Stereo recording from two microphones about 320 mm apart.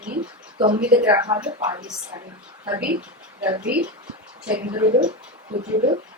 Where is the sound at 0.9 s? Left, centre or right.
Centre.